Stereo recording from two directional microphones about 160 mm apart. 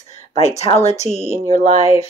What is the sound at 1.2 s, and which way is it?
Speech, 15° right (ahead or behind).